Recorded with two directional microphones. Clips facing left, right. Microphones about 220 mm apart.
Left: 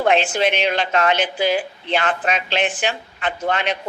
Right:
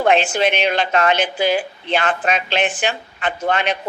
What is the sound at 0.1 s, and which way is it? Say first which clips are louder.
A woman's voice: right 1 dB; 50° right (ahead or behind).